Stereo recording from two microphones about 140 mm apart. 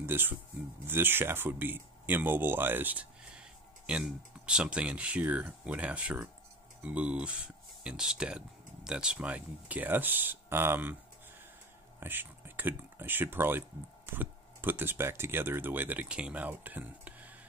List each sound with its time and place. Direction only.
0.0 s speech: 15° right (ahead or behind)
12.0 s speech: 15° right (ahead or behind)